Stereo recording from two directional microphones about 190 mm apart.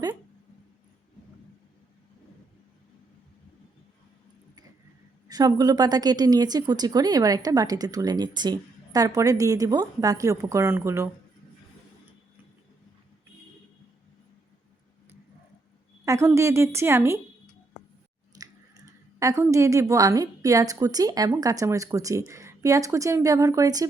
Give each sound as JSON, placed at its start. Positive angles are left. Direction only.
{"t": 5.3, "sound": "a woman's voice", "side_deg": -20}
{"t": 16.0, "sound": "a woman's voice", "side_deg": -15}
{"t": 18.9, "sound": "a woman's voice", "side_deg": -15}